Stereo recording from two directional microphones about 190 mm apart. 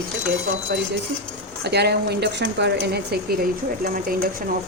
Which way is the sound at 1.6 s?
60° right (ahead or behind).